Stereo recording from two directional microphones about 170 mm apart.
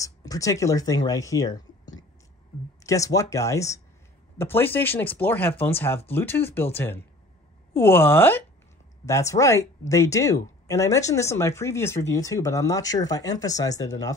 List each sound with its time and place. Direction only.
0.0 s speech: 20° left (ahead or behind)